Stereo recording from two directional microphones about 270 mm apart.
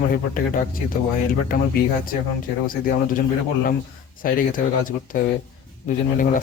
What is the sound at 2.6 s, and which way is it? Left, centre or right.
Speech, left.